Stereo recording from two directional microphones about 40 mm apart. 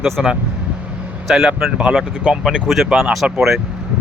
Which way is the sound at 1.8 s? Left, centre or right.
Right.